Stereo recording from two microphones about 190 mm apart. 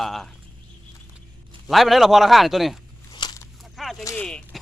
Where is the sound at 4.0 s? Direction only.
15° left (ahead or behind).